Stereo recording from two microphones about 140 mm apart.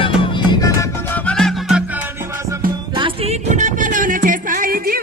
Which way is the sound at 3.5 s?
65° right (ahead or behind).